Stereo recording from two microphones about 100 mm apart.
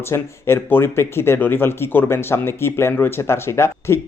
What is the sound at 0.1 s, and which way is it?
Speech, 25° left (ahead or behind).